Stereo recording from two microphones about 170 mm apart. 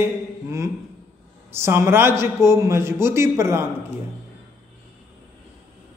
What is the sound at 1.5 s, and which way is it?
A man's voice, 15° right (ahead or behind).